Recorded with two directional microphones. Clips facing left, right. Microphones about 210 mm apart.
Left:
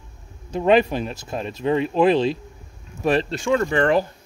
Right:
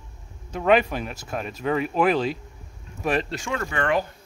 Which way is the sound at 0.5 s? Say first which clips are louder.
Left 3 dB; 30° left (ahead or behind).